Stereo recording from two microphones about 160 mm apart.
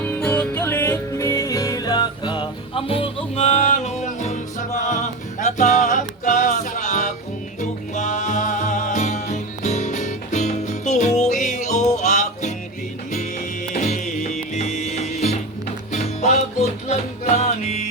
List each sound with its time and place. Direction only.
0.0 s music: 10° left (ahead or behind); by 12.5 s 45° left (ahead or behind)
13.7 s music: 50° left (ahead or behind)